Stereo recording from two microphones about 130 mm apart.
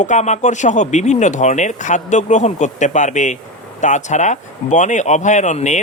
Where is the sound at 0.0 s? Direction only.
65° left (ahead or behind).